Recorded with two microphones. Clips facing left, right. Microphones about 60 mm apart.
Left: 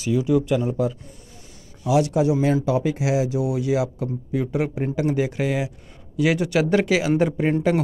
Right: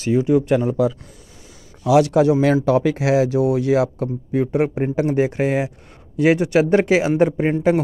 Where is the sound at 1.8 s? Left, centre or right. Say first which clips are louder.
Right 5 dB; right.